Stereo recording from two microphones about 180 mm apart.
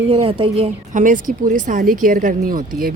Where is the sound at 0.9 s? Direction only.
45° right (ahead or behind).